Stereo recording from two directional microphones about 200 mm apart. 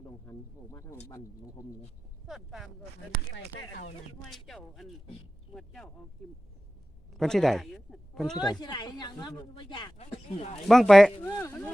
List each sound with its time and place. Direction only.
0.3 s speech: 15° left (ahead or behind)
2.2 s speech: centre (ahead or behind)
4.3 s speech: centre (ahead or behind)
7.1 s speech: centre (ahead or behind)
8.4 s speech: 20° left (ahead or behind)
10.0 s speech: 30° left (ahead or behind)
10.7 s speech: centre (ahead or behind)
11.2 s speech: 10° left (ahead or behind)